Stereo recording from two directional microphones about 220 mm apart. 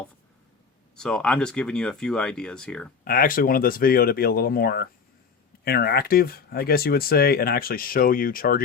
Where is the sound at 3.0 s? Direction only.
40° left (ahead or behind).